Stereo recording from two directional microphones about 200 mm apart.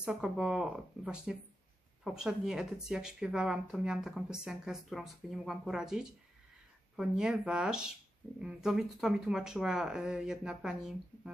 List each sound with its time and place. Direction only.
0.0 s speech: 5° right (ahead or behind)